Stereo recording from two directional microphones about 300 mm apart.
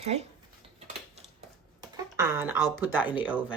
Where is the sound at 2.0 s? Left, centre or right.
Centre.